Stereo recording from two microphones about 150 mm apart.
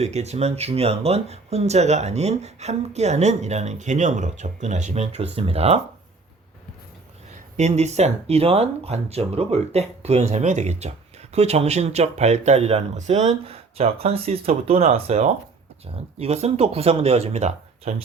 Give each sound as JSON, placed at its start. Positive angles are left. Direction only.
{"t": 0.0, "sound": "speech", "side_deg": -45}
{"t": 7.5, "sound": "speech", "side_deg": -50}